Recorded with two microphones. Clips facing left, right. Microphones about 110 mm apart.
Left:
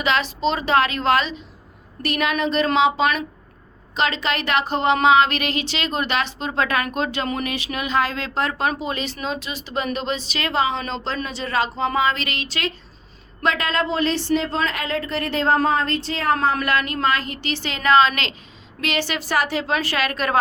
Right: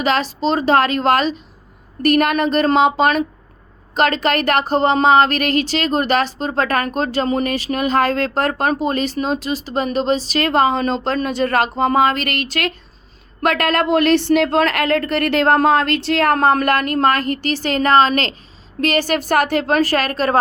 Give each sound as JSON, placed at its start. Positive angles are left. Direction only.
{"t": 0.0, "sound": "a woman's voice", "side_deg": -40}